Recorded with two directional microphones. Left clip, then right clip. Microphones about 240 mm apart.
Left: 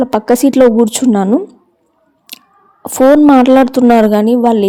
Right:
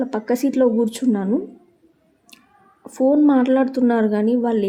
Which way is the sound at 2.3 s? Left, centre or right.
Left.